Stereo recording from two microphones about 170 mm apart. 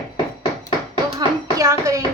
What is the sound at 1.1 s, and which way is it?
Speech, 20° right (ahead or behind).